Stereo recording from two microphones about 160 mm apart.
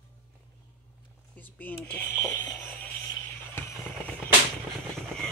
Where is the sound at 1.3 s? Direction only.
10° left (ahead or behind).